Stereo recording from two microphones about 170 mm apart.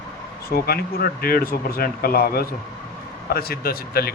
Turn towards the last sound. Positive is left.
turn(degrees=65)  # may be behind; listen again after turning